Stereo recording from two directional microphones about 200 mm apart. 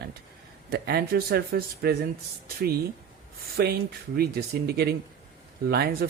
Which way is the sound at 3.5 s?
50° right (ahead or behind).